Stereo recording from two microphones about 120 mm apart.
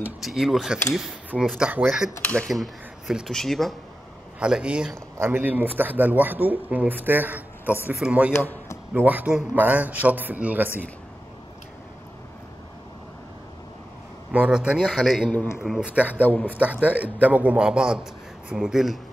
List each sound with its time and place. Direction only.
0.2 s speech: centre (ahead or behind)
2.2 s speech: 5° left (ahead or behind); by 8.3 s 10° right (ahead or behind)
8.3 s speech: 20° left (ahead or behind)
8.9 s speech: 15° right (ahead or behind)
14.3 s speech: 10° right (ahead or behind)
15.3 s speech: 20° left (ahead or behind)
15.6 s speech: 5° right (ahead or behind)
16.2 s a man's voice: 10° left (ahead or behind)
16.8 s speech: 10° right (ahead or behind)